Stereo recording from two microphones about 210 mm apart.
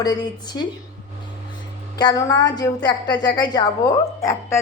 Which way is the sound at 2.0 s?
15° left (ahead or behind).